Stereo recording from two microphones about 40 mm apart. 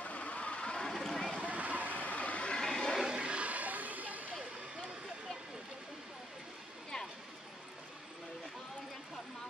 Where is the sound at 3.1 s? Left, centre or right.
Right.